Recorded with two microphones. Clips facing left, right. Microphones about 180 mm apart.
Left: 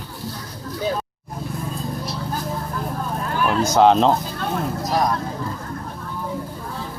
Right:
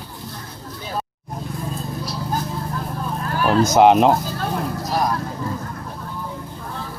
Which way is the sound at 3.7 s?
15° right (ahead or behind).